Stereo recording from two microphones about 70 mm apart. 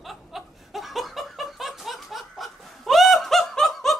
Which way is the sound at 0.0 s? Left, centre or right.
Centre.